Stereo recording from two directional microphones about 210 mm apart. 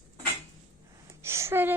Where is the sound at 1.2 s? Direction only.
10° right (ahead or behind).